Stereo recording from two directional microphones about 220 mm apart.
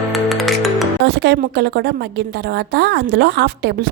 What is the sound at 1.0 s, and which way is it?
A woman's voice, 50° right (ahead or behind).